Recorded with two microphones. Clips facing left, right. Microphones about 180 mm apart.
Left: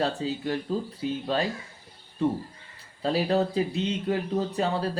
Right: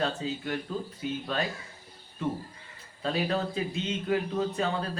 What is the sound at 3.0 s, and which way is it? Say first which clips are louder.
Speech: left 5 dB; 30° left (ahead or behind).